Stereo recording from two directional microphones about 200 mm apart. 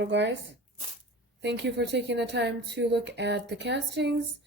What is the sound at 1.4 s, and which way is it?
A woman's voice, 60° right (ahead or behind).